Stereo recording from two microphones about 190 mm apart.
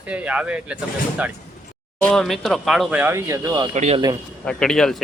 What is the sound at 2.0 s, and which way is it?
Speech, centre (ahead or behind).